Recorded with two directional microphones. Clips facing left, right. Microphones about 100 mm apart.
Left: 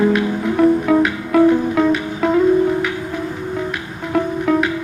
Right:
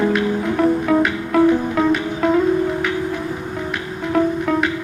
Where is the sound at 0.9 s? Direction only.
Centre (ahead or behind).